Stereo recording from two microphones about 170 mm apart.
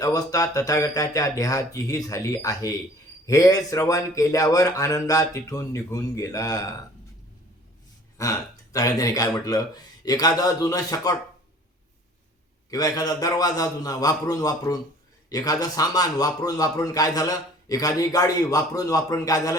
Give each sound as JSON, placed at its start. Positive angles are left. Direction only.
{"t": 0.0, "sound": "a man's voice", "side_deg": 20}
{"t": 8.2, "sound": "a man's voice", "side_deg": 20}
{"t": 12.7, "sound": "a man's voice", "side_deg": 20}